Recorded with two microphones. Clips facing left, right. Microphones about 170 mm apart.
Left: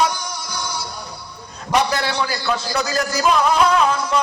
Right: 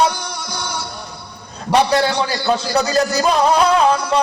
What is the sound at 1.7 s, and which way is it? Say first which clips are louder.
A man's voice: right 5 dB; 35° right (ahead or behind).